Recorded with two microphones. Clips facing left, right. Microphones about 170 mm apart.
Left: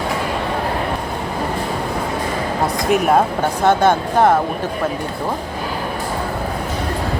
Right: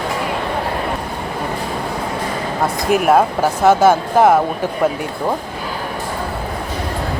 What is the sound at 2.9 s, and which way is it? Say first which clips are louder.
A woman's voice: right 2 dB; centre (ahead or behind).